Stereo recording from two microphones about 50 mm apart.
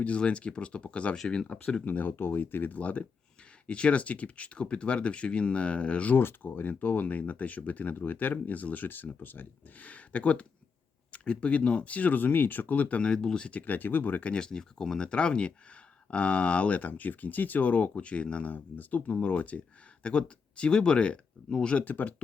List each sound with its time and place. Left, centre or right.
0.0 s speech: left
1.1 s speech: centre
1.8 s speech: left
6.1 s speech: left; by 13.5 s centre
13.5 s speech: left
14.3 s speech: centre
18.5 s speech: left; by 21.8 s centre
21.8 s speech: left